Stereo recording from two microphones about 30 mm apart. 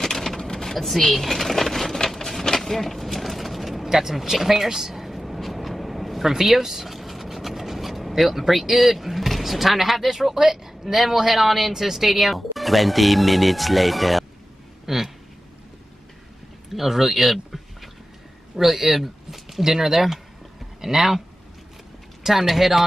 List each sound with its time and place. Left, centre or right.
0.0 s a sound: centre
0.7 s speech: centre
2.0 s vehicle: centre
3.9 s speech: centre
4.6 s a sound: centre
6.3 s speech: centre
14.9 s speech: centre
16.7 s speech: centre
18.6 s speech: centre
22.2 s speech: centre